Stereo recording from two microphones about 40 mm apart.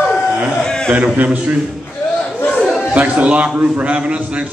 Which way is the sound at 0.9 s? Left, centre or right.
Right.